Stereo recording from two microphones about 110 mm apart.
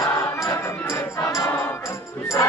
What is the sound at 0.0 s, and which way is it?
Music, 25° left (ahead or behind).